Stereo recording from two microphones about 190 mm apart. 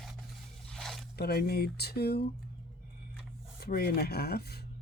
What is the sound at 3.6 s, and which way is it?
Speech, 55° left (ahead or behind).